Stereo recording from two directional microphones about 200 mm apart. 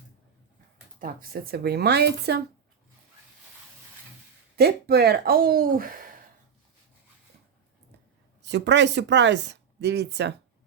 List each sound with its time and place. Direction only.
1.0 s speech: 45° right (ahead or behind)
4.5 s speech: 50° right (ahead or behind)
8.4 s speech: 60° right (ahead or behind)